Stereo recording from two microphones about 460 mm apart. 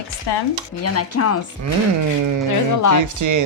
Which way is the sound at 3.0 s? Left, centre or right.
Right.